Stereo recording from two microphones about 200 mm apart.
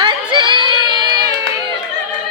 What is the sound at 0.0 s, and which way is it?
Crowd, 25° right (ahead or behind).